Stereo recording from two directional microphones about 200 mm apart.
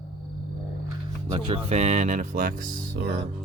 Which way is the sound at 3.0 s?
55° right (ahead or behind).